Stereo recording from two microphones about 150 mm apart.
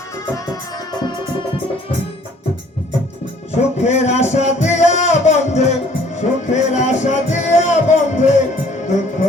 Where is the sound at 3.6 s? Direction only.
50° left (ahead or behind).